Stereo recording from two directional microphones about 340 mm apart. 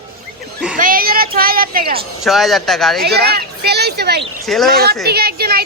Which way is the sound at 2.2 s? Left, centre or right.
Centre.